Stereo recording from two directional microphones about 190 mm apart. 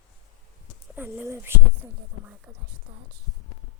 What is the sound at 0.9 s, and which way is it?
Speech, 10° right (ahead or behind).